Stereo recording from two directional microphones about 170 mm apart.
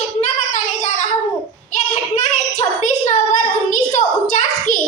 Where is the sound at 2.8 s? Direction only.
45° left (ahead or behind).